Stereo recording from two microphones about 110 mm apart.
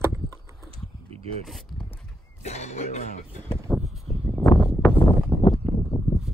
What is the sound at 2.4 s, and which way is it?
Cough, 90° left.